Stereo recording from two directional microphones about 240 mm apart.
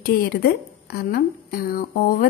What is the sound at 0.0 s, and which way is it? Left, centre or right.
A woman's voice, left.